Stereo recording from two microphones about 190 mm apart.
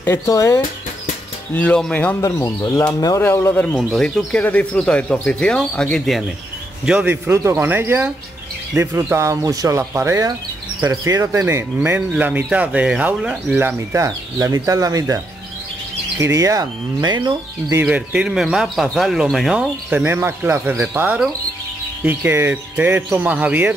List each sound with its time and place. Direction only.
0.0 s speech: 15° left (ahead or behind)
6.9 s speech: 10° right (ahead or behind)
17.8 s speech: 5° right (ahead or behind)